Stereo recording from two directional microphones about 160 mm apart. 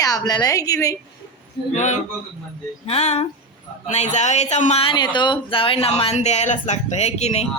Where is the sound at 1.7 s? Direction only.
50° left (ahead or behind).